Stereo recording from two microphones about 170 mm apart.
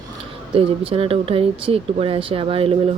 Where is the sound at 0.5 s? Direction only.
30° right (ahead or behind).